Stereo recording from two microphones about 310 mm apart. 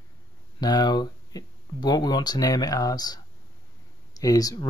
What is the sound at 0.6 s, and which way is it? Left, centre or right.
Speech, centre.